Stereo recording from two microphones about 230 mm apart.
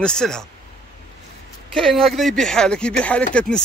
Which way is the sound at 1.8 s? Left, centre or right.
Centre.